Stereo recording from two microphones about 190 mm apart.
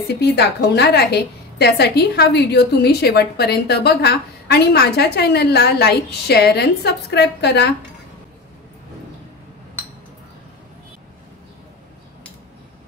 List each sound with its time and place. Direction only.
0.2 s a woman's voice: 60° left (ahead or behind)